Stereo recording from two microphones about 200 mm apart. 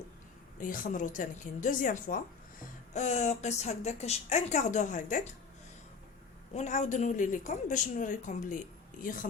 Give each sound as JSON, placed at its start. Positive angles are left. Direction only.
{"t": 0.6, "sound": "speech", "side_deg": 40}
{"t": 6.5, "sound": "speech", "side_deg": 35}